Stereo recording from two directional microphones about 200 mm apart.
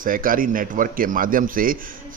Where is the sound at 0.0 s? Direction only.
45° right (ahead or behind).